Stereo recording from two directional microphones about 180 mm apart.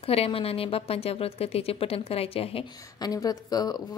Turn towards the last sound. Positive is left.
turn(degrees=20)  # may be behind; listen again after turning